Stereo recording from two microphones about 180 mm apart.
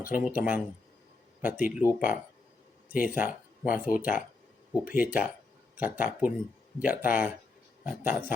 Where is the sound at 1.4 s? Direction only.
10° right (ahead or behind).